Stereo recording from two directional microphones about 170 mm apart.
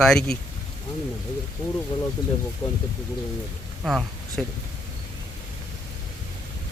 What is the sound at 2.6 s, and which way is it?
Speech, 20° left (ahead or behind).